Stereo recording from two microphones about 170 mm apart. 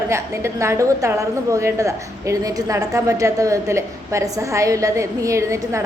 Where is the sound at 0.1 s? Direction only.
15° right (ahead or behind).